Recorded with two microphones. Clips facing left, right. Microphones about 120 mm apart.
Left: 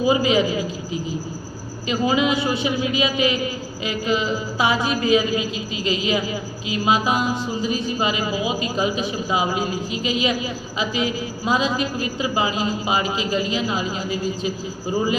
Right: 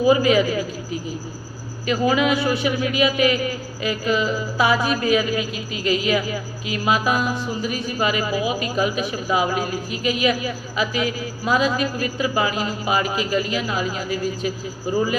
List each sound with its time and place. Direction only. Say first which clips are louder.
0.0 s a woman's voice: right 2 dB; 25° left (ahead or behind)
1.9 s a woman's voice: right 1 dB; 25° left (ahead or behind)